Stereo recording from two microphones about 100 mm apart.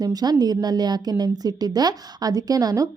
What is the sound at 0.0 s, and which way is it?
A woman's voice, 40° right (ahead or behind).